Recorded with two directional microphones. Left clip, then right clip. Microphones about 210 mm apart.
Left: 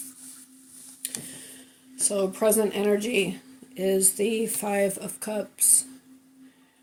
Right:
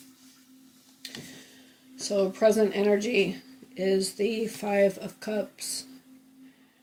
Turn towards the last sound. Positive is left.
turn(degrees=45)  # may be behind; listen again after turning